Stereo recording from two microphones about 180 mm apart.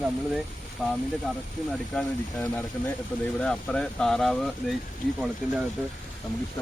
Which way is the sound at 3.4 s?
5° left (ahead or behind).